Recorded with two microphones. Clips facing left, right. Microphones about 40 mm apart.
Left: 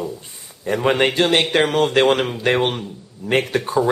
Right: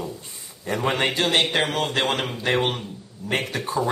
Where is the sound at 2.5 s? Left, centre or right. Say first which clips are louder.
Left 2 dB; centre.